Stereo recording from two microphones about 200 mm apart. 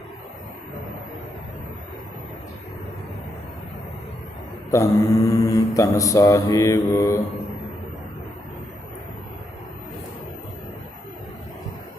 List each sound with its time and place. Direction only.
4.7 s mantra: 15° left (ahead or behind)